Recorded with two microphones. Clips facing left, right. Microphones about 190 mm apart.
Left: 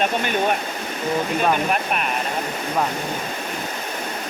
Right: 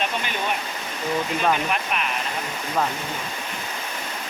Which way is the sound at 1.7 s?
45° left (ahead or behind).